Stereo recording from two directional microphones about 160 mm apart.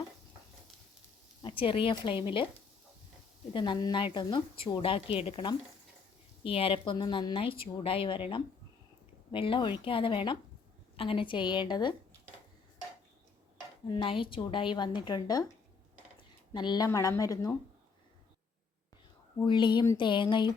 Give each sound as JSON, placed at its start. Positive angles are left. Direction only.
{"t": 1.4, "sound": "speech", "side_deg": 30}
{"t": 3.5, "sound": "a woman's voice", "side_deg": 30}
{"t": 13.8, "sound": "speech", "side_deg": 30}
{"t": 16.5, "sound": "a woman's voice", "side_deg": 25}
{"t": 19.5, "sound": "a woman's voice", "side_deg": 30}